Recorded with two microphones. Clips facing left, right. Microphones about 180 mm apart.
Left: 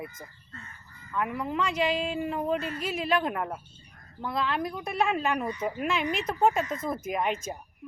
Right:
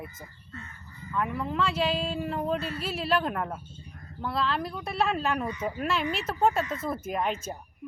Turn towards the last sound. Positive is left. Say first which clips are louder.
# left 1 dB
turn(degrees=10)  # may be behind; listen again after turning